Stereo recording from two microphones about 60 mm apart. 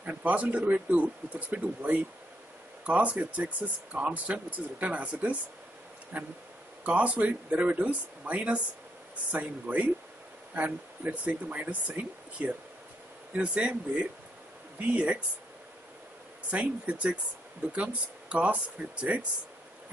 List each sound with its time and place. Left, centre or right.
0.0 s speech: right
16.4 s speech: right